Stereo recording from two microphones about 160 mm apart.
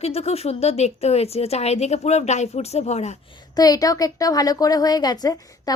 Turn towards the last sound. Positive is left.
turn(degrees=25)  # may be behind; listen again after turning